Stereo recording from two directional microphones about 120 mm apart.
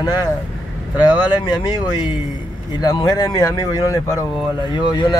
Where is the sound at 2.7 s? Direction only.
35° left (ahead or behind).